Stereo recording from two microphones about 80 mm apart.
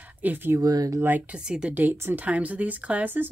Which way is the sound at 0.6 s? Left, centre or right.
Right.